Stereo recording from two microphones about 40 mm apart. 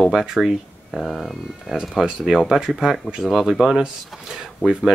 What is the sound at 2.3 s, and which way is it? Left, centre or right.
Speech, centre.